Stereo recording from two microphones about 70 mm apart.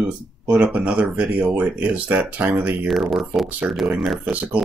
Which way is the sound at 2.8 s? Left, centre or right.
Centre.